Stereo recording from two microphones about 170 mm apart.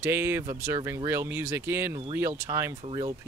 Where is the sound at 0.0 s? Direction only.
15° right (ahead or behind).